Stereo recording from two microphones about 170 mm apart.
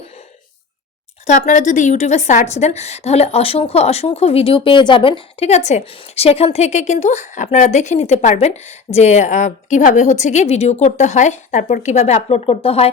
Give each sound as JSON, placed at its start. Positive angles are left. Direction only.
{"t": 1.3, "sound": "a woman's voice", "side_deg": 45}